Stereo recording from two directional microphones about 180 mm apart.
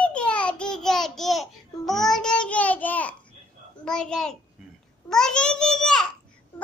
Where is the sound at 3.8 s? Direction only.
5° left (ahead or behind).